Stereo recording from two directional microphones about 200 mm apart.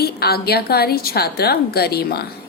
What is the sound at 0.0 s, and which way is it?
A woman's voice, 50° left (ahead or behind).